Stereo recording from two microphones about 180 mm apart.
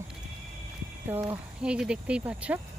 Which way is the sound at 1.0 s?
15° right (ahead or behind).